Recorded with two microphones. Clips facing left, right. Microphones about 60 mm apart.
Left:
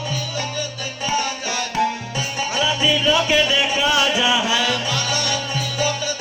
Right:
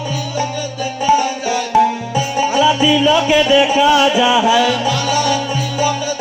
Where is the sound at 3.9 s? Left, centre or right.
Right.